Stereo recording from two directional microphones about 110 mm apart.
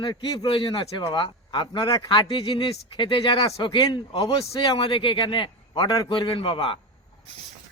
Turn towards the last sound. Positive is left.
turn(degrees=55)  # may be behind; listen again after turning